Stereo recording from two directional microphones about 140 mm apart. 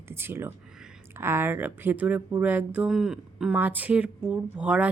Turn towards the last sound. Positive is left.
turn(degrees=-10)  # may be behind; listen again after turning